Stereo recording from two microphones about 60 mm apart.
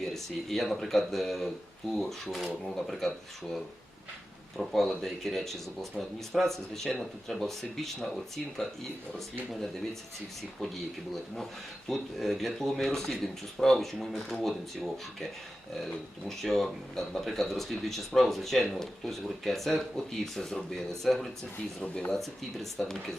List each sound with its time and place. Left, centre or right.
0.0 s speech: centre
4.9 s speech: centre
10.6 s speech: centre
22.2 s speech: centre